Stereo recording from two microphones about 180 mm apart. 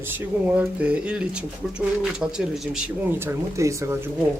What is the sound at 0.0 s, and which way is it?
Speech, 10° right (ahead or behind).